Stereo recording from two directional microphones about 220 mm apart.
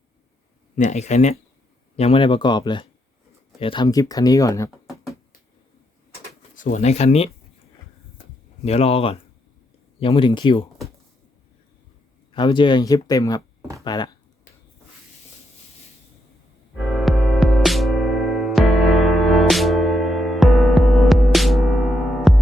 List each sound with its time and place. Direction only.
0.8 s speech: 30° left (ahead or behind); by 4.7 s 15° left (ahead or behind)
6.6 s speech: 35° left (ahead or behind)
8.6 s speech: 30° left (ahead or behind)
12.3 s speech: 20° left (ahead or behind)
13.6 s a sound: 5° right (ahead or behind)
13.8 s speech: 20° left (ahead or behind)
16.7 s music: centre (ahead or behind)